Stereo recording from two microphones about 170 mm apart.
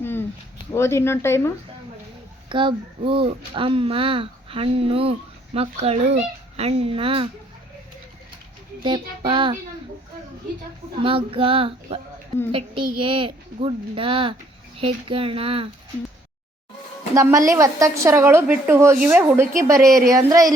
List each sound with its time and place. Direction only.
0.0 s a sound: 15° left (ahead or behind)
0.7 s speech: 15° left (ahead or behind)
2.5 s a child's voice: 30° right (ahead or behind)
8.8 s child singing: 30° right (ahead or behind)
11.0 s a child's voice: 30° right (ahead or behind)
17.2 s a woman's voice: 20° right (ahead or behind)
19.9 s child singing: 20° right (ahead or behind)